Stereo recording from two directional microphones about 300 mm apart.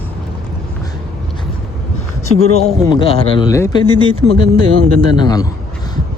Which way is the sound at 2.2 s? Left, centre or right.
Left.